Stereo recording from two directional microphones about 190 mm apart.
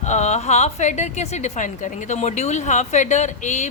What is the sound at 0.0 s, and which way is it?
A woman's voice, 35° left (ahead or behind).